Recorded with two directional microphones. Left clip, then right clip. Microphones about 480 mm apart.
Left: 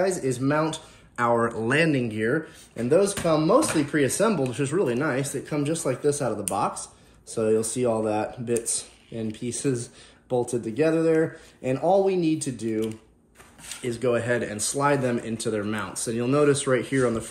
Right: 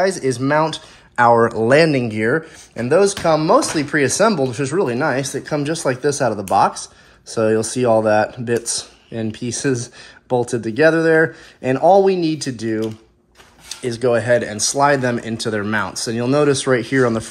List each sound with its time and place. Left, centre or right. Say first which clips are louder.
0.0 s speech: right 7 dB; centre
13.8 s speech: right 8 dB; centre